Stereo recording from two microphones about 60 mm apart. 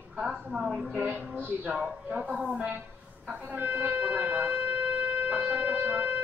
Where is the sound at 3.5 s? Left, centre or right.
Right.